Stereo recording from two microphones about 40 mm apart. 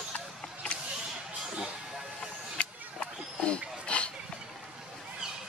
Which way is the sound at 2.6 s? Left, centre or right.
Left.